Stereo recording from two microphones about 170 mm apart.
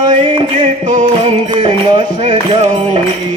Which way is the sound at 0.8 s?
50° right (ahead or behind).